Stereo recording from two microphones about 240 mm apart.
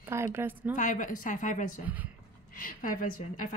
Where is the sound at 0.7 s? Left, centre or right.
Left.